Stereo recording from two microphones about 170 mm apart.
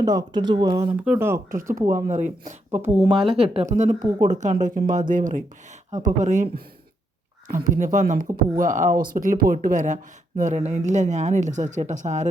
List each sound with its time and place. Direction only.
0.0 s speech: 20° right (ahead or behind)
1.0 s speech: 15° right (ahead or behind)
2.0 s speech: 45° right (ahead or behind)
2.8 s speech: 10° right (ahead or behind)
3.3 s speech: 35° right (ahead or behind)
7.5 s speech: 50° right (ahead or behind)